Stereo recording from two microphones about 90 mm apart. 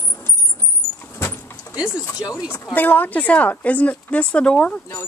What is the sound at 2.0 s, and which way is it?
Speech, 40° left (ahead or behind).